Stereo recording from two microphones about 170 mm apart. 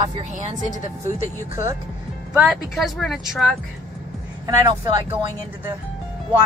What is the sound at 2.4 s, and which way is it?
Speech, centre (ahead or behind).